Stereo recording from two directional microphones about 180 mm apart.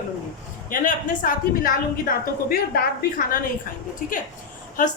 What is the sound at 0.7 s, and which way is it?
A woman's voice, 45° left (ahead or behind).